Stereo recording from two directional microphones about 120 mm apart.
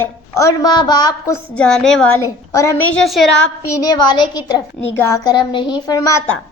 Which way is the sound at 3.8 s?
35° left (ahead or behind).